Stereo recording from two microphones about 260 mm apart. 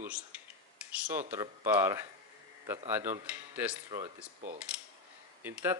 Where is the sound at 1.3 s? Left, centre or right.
Centre.